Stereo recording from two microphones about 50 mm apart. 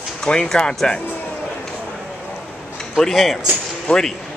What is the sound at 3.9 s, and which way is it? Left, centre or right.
Speech, centre.